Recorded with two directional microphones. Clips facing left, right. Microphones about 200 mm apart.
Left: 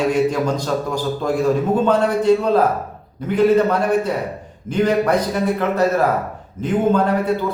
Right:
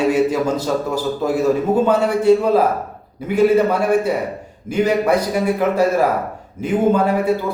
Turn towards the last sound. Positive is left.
turn(degrees=-10)  # may be behind; listen again after turning